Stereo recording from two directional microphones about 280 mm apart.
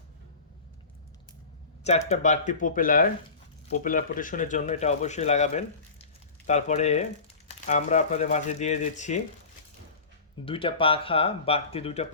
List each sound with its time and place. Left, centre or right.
1.8 s speech: left
10.4 s speech: centre